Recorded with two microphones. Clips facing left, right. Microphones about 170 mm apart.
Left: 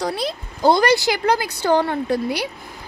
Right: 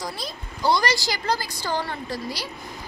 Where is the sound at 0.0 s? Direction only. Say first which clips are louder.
Left 9 dB; 60° left (ahead or behind).